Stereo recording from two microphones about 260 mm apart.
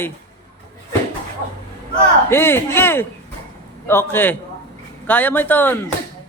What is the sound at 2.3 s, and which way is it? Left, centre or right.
A woman's voice, centre.